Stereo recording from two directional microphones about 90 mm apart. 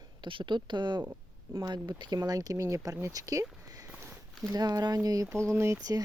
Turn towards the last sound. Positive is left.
turn(degrees=-30)  # may be behind; listen again after turning